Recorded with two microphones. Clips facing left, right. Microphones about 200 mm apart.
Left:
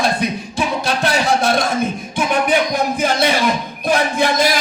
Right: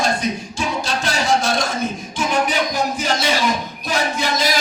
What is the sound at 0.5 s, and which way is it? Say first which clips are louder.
Music: left 3 dB; 60° left (ahead or behind).